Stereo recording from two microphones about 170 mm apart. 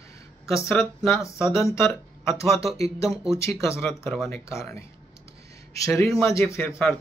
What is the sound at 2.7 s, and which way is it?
Speech, 35° right (ahead or behind).